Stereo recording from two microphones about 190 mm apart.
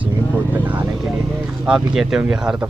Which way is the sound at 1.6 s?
5° right (ahead or behind).